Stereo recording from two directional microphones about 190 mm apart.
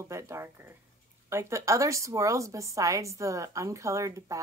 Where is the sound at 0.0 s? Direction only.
15° right (ahead or behind).